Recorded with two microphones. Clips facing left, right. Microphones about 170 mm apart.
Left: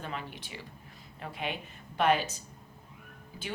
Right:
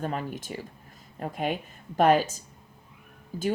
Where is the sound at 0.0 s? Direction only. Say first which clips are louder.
Right 8 dB; 45° right (ahead or behind).